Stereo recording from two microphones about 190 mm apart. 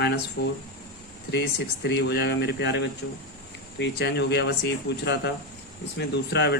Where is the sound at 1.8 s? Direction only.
60° left (ahead or behind).